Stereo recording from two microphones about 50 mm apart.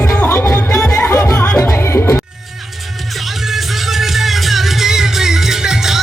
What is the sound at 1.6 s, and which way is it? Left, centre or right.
Music, left.